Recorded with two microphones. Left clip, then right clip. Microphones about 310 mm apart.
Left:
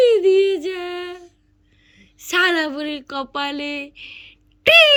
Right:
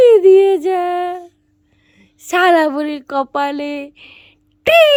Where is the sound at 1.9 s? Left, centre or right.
Centre.